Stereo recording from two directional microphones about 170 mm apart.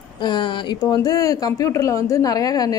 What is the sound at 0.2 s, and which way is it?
A woman's voice, 25° left (ahead or behind).